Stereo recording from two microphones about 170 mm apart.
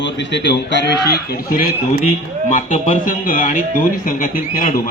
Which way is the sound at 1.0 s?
70° left (ahead or behind).